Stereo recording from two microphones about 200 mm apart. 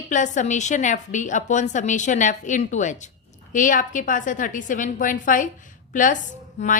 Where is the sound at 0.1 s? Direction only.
40° left (ahead or behind).